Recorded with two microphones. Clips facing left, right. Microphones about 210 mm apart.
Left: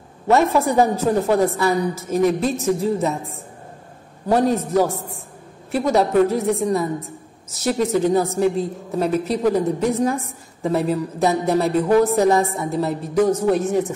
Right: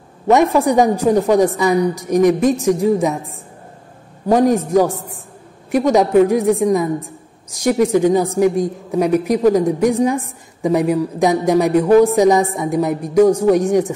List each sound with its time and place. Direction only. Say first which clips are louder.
0.3 s speech: right 4 dB; 15° right (ahead or behind)
4.3 s speech: right 4 dB; 15° right (ahead or behind)